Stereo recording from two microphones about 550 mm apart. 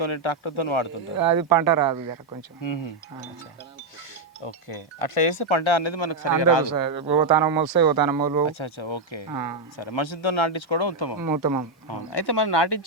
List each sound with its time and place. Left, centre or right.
0.0 s speech: left
1.1 s speech: right
2.6 s speech: left
4.4 s speech: left
6.7 s speech: right
7.0 s speech: centre
7.5 s speech: right
8.4 s speech: left
11.2 s speech: right
11.9 s speech: left